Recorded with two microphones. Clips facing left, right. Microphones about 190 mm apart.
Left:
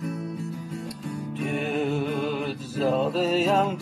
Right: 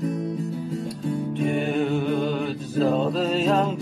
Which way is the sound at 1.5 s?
Centre (ahead or behind).